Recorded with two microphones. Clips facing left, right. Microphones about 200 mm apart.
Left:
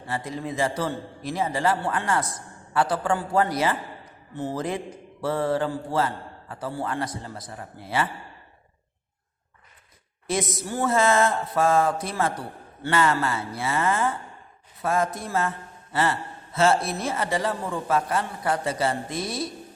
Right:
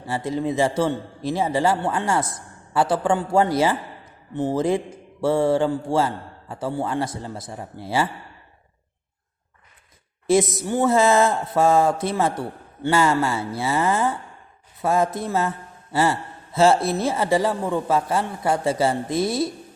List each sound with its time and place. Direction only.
0.1 s a man's voice: 25° right (ahead or behind)
10.7 s a man's voice: 25° right (ahead or behind)